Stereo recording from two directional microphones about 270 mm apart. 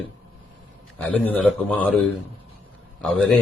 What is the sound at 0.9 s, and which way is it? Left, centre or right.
Speech, centre.